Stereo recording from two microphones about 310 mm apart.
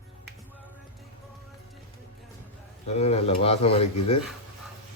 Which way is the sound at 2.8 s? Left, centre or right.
Centre.